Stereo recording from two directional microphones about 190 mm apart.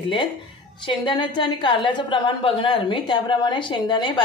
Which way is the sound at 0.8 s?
25° left (ahead or behind).